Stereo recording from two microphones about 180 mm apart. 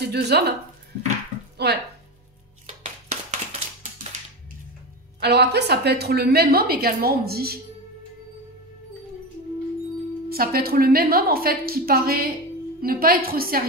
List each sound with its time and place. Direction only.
0.1 s a woman's voice: 65° right (ahead or behind)
1.6 s a woman's voice: 65° right (ahead or behind)
2.6 s a sound: 40° right (ahead or behind)
5.2 s a woman's voice: 65° right (ahead or behind)
10.3 s a woman's voice: 55° right (ahead or behind)